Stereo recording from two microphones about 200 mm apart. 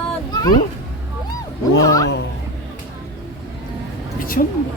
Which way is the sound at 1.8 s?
15° left (ahead or behind).